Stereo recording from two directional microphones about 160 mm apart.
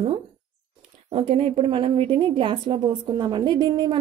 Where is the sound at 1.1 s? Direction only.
40° right (ahead or behind).